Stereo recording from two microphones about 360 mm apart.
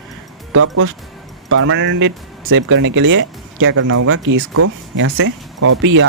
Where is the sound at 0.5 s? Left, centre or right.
Right.